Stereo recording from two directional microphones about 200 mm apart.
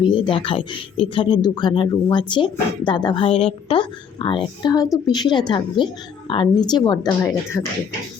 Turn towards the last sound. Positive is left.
turn(degrees=15)  # may be behind; listen again after turning